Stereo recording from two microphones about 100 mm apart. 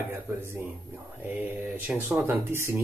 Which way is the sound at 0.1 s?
25° right (ahead or behind).